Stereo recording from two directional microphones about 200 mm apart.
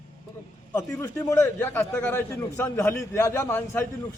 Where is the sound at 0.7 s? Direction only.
15° left (ahead or behind).